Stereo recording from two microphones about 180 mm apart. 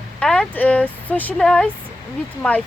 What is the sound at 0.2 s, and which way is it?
Speech, 5° left (ahead or behind).